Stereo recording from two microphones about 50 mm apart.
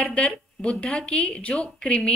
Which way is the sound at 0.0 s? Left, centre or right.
Left.